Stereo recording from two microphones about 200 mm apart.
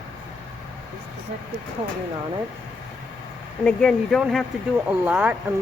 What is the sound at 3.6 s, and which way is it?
Speech, 5° left (ahead or behind).